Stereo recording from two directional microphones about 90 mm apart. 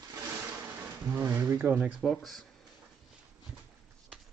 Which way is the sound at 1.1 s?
30° right (ahead or behind).